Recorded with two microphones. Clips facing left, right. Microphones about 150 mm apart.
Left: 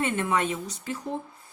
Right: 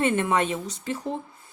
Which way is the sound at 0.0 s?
25° right (ahead or behind).